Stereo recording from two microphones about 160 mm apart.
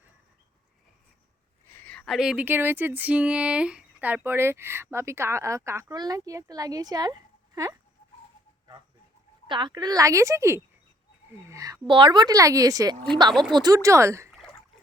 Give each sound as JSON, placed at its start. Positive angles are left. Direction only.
{"t": 1.7, "sound": "speech", "side_deg": 10}
{"t": 9.5, "sound": "a woman's voice", "side_deg": -30}